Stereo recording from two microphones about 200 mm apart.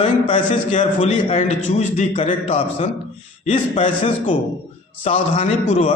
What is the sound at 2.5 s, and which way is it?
A man's voice, 25° left (ahead or behind).